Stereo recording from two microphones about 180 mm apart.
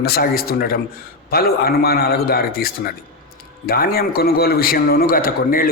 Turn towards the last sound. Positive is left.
turn(degrees=50)  # may be behind; listen again after turning